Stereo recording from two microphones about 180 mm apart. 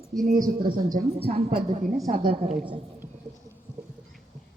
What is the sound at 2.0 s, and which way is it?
Speech, 55° right (ahead or behind).